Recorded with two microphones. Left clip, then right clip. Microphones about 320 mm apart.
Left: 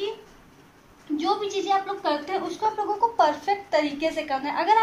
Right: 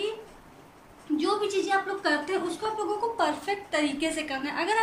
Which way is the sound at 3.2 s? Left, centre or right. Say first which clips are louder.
Left 6 dB; centre.